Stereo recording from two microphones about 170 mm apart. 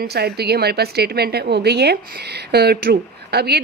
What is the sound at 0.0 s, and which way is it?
A woman's voice, 70° right (ahead or behind).